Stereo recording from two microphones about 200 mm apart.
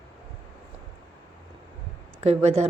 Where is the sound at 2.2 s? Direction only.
30° right (ahead or behind).